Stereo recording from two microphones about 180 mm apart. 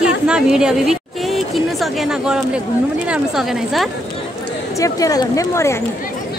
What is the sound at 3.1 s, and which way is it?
Speech, centre (ahead or behind).